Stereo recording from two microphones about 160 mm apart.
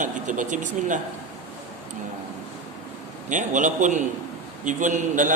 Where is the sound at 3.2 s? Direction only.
50° right (ahead or behind).